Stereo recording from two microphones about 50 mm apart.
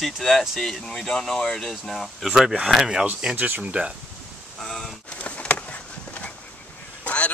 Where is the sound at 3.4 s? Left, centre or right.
Right.